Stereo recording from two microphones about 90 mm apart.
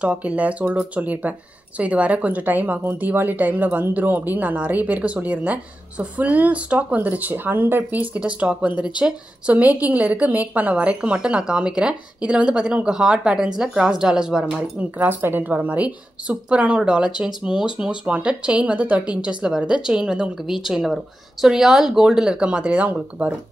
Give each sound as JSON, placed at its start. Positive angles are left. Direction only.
{"t": 0.0, "sound": "speech", "side_deg": -15}